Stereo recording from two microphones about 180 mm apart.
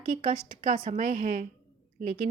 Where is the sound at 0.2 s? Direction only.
30° right (ahead or behind).